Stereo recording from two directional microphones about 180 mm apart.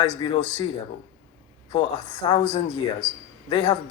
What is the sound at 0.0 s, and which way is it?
Speech, 25° left (ahead or behind).